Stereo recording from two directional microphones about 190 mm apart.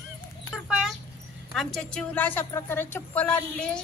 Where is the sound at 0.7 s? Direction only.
Centre (ahead or behind).